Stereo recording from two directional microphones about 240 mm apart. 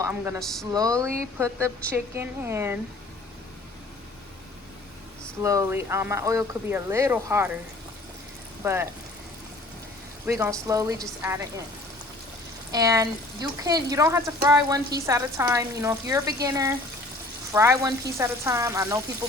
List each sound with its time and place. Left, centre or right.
0.0 s speech: centre
0.3 s speech: centre
0.6 s speech: centre
5.4 s speech: centre
8.6 s speech: centre
10.2 s speech: centre
12.7 s speech: centre